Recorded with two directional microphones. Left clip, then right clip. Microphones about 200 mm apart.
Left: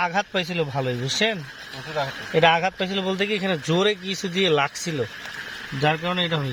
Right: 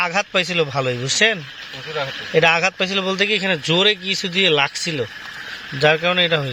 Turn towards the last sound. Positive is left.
turn(degrees=-20)  # may be behind; listen again after turning